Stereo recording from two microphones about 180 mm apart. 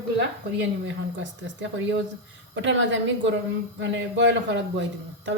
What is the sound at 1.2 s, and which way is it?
Speech, 90° right.